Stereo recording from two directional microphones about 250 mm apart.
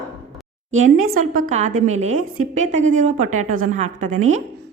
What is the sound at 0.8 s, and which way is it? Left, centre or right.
A woman's voice, right.